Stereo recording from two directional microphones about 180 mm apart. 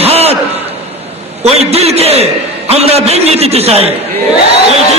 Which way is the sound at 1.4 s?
35° right (ahead or behind).